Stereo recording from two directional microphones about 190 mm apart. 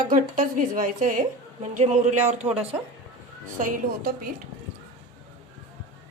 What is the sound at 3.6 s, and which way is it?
Speech, 45° right (ahead or behind).